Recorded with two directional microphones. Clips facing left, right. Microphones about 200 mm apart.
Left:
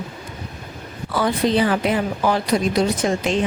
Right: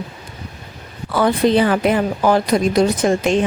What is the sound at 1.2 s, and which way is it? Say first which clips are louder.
Speech: right 4 dB; 55° right (ahead or behind).